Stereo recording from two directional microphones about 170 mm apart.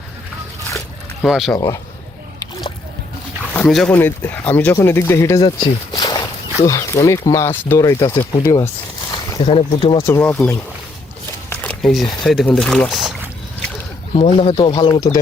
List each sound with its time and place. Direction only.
1.2 s speech: centre (ahead or behind)
1.5 s speech: 20° left (ahead or behind)
3.7 s speech: centre (ahead or behind)
3.9 s speech: 10° left (ahead or behind)
5.5 s speech: 30° left (ahead or behind)
9.1 s speech: 25° left (ahead or behind)
10.0 s speech: 15° left (ahead or behind)
11.4 s a sound: 10° left (ahead or behind)
12.2 s speech: centre (ahead or behind)
14.2 s speech: 35° left (ahead or behind)